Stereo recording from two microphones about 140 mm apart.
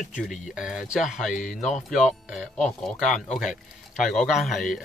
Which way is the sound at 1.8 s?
Centre (ahead or behind).